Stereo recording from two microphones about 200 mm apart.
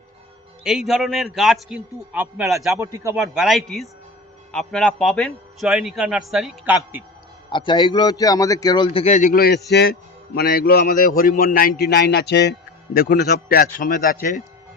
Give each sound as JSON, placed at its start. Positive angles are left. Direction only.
{"t": 0.6, "sound": "a man's voice", "side_deg": 0}
{"t": 2.7, "sound": "a man's voice", "side_deg": -15}
{"t": 3.2, "sound": "a man's voice", "side_deg": 0}
{"t": 7.5, "sound": "a man's voice", "side_deg": 25}